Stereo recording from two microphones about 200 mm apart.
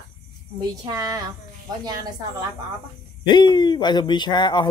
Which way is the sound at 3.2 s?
20° left (ahead or behind).